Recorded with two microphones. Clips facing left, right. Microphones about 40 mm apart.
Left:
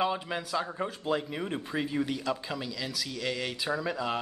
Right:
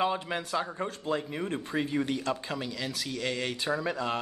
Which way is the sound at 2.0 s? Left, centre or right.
Right.